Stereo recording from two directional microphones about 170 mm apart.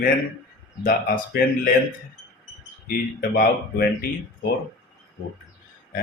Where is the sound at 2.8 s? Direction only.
55° left (ahead or behind).